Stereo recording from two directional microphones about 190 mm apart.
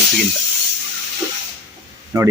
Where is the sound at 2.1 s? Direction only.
15° right (ahead or behind).